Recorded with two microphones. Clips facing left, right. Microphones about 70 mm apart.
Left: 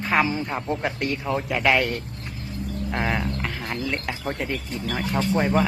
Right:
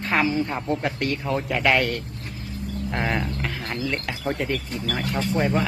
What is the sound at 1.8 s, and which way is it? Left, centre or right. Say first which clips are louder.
Speech: even; left.